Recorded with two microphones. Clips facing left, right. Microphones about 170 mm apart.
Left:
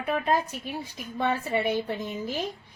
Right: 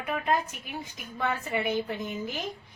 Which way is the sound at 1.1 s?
30° left (ahead or behind).